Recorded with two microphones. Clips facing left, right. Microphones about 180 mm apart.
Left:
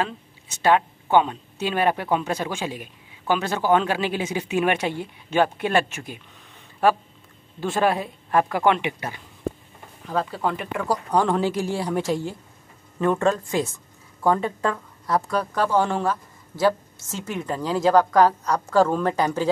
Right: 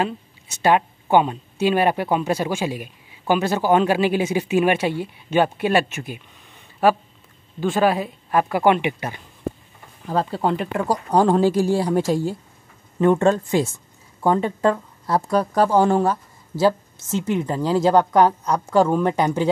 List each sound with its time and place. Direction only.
0.0 s speech: 10° right (ahead or behind)
7.6 s speech: centre (ahead or behind)
10.1 s speech: 30° right (ahead or behind)
13.0 s speech: 25° right (ahead or behind); by 16.2 s 40° right (ahead or behind)
16.5 s a woman's voice: 25° right (ahead or behind)